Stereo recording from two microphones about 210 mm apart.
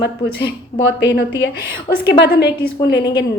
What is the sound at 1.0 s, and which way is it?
A woman's voice, 55° left (ahead or behind).